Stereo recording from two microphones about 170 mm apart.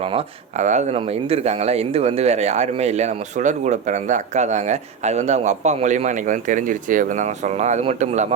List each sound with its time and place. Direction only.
0.0 s speech: 35° right (ahead or behind)